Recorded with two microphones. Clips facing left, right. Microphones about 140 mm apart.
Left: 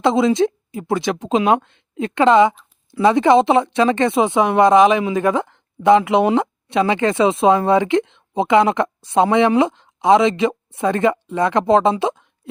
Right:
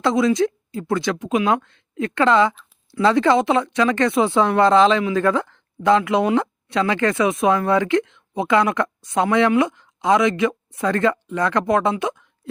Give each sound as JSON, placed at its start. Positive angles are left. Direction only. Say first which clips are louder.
{"t": 0.0, "sound": "speech", "louder": "left 2 dB", "side_deg": 25}